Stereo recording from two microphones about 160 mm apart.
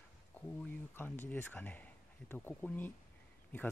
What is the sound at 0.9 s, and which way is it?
Speech, 15° left (ahead or behind).